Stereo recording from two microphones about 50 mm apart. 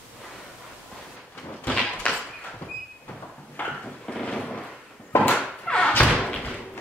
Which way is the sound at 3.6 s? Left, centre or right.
Left.